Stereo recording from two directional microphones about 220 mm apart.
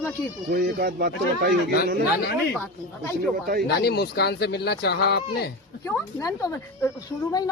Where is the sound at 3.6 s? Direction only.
50° left (ahead or behind).